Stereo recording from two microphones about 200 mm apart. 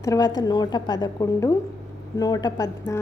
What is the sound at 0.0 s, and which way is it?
A woman's voice, 15° left (ahead or behind).